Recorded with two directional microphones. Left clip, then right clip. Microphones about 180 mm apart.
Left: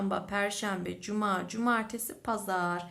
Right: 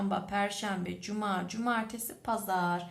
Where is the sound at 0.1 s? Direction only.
25° left (ahead or behind).